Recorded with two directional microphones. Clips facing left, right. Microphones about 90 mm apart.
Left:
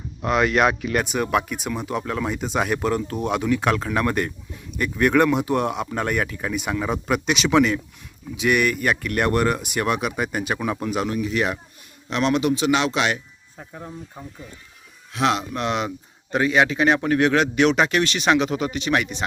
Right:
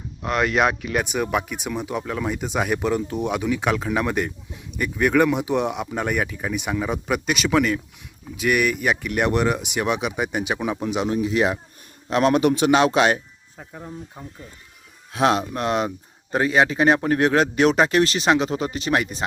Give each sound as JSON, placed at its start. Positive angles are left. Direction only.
{"t": 0.2, "sound": "speech", "side_deg": 0}
{"t": 12.1, "sound": "a man's voice", "side_deg": -45}
{"t": 13.6, "sound": "speech", "side_deg": 0}
{"t": 15.1, "sound": "a man's voice", "side_deg": -35}